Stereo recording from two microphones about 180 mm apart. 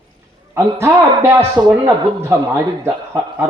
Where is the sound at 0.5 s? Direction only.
15° right (ahead or behind).